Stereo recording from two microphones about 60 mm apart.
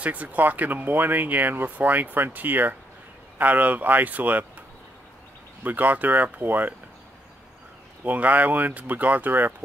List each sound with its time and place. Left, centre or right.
0.0 s speech: right
8.0 s speech: right